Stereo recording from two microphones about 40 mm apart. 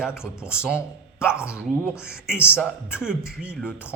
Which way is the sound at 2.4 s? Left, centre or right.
Left.